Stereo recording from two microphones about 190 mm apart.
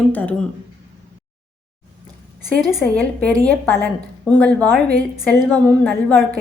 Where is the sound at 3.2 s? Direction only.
5° left (ahead or behind).